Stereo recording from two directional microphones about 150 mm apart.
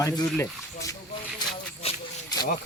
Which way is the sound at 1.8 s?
40° left (ahead or behind).